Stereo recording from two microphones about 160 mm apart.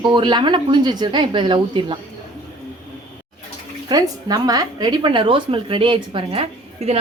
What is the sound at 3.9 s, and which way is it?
A woman's voice, 25° right (ahead or behind).